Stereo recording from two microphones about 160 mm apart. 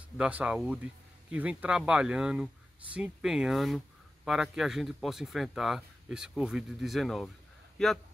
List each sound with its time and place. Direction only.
0.2 s speech: 10° right (ahead or behind)